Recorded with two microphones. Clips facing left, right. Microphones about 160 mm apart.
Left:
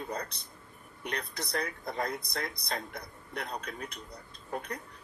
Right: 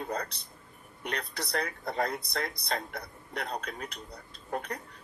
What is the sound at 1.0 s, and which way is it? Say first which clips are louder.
Speech: right 1 dB; 30° right (ahead or behind).